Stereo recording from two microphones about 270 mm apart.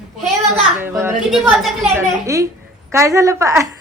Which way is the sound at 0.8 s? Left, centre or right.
Centre.